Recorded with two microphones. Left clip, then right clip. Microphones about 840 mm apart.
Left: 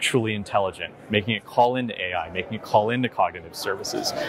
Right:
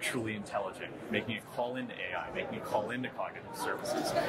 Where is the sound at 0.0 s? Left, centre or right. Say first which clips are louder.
Left 12 dB; left.